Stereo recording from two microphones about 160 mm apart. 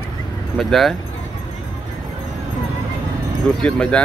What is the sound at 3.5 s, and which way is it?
Speech, 5° left (ahead or behind).